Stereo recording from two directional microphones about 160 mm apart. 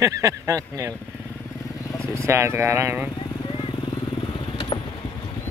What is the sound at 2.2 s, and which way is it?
Speech, 15° right (ahead or behind).